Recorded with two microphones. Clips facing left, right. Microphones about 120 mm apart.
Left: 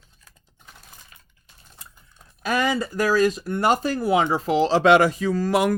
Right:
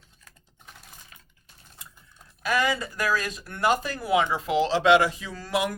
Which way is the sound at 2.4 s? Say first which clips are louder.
Left 3 dB; 35° left (ahead or behind).